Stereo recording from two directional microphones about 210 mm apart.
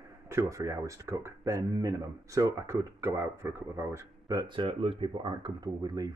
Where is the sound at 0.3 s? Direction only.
15° right (ahead or behind).